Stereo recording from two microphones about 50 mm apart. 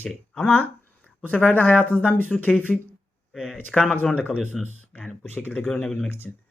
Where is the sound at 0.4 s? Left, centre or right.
Left.